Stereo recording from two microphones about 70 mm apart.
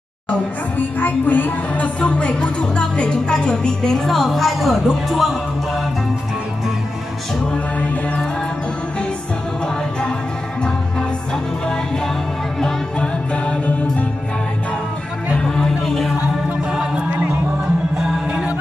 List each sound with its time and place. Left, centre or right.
0.3 s speech: left; by 5.4 s centre
7.5 s music: centre
12.5 s music: centre
15.3 s music: centre
16.7 s music: centre